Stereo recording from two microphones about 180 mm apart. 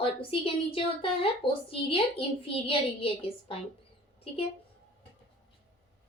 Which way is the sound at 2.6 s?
30° left (ahead or behind).